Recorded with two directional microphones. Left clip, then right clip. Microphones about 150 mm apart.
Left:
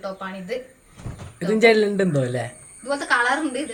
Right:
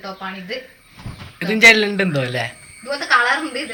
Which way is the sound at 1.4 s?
25° left (ahead or behind).